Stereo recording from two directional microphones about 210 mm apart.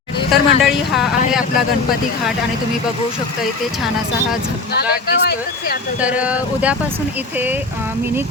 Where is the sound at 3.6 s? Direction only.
Centre (ahead or behind).